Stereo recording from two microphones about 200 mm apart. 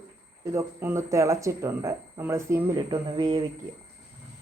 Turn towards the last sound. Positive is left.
turn(degrees=-20)  # may be behind; listen again after turning